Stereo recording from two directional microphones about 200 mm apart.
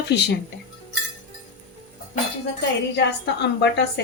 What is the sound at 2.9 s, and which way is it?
Speech, 60° left (ahead or behind).